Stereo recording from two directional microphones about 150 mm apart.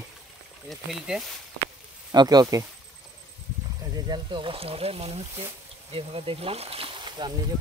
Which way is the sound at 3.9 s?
30° right (ahead or behind).